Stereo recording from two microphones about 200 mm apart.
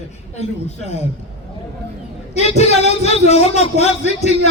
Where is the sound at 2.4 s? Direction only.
35° left (ahead or behind).